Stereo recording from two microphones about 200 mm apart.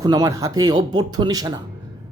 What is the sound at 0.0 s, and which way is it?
Speech, 20° right (ahead or behind).